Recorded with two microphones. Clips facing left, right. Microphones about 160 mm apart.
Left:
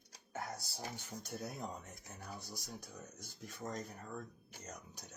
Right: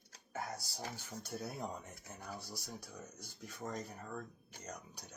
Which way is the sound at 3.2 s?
50° left (ahead or behind).